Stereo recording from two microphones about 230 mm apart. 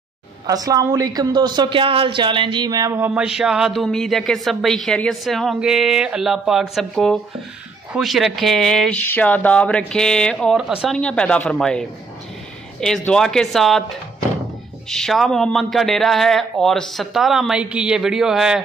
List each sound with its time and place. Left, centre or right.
0.5 s a woman's voice: centre
12.8 s a woman's voice: centre
14.9 s a woman's voice: centre